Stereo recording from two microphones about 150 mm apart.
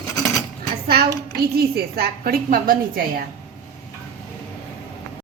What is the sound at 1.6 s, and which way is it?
A woman's voice, 90° right.